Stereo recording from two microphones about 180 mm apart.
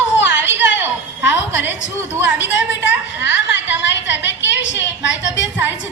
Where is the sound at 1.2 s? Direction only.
90° left.